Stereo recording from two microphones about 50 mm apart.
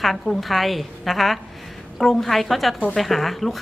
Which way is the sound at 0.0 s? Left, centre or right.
Centre.